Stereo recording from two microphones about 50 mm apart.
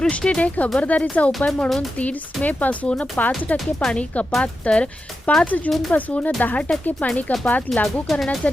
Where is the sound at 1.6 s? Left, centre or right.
Centre.